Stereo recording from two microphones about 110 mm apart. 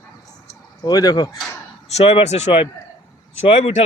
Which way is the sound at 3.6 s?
90° left.